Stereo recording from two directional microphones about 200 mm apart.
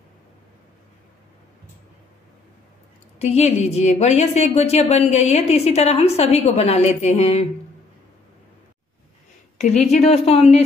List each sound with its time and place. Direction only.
3.2 s a woman's voice: 30° left (ahead or behind)
9.6 s a woman's voice: 35° left (ahead or behind)